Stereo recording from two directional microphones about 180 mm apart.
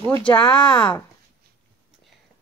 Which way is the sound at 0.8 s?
5° left (ahead or behind).